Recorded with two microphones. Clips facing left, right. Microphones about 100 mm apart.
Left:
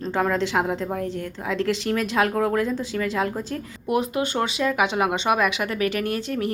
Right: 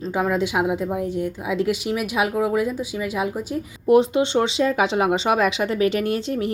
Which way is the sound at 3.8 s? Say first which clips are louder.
Right 7 dB; 30° right (ahead or behind).